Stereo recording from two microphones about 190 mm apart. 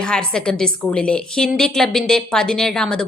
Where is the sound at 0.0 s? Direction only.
5° left (ahead or behind).